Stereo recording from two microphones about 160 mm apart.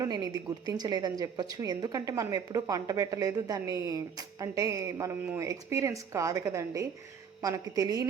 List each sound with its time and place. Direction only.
0.0 s a woman's voice: 20° right (ahead or behind)